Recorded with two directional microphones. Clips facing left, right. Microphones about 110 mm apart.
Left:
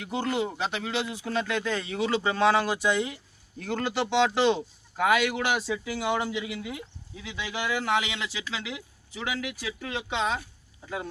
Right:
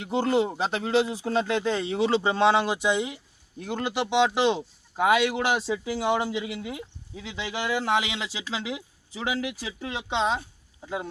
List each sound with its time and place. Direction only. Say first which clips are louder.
0.0 s speech: right 5 dB; 30° right (ahead or behind)